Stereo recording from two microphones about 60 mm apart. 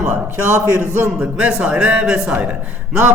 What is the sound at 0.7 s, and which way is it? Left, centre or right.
Speech, right.